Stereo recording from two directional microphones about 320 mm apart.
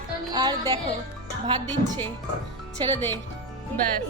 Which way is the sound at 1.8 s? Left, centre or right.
Right.